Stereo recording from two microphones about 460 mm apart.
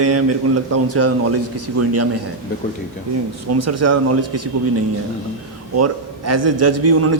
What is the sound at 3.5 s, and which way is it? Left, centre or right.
Speech, right.